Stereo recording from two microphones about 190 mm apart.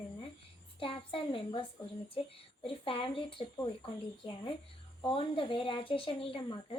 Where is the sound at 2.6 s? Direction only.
30° left (ahead or behind).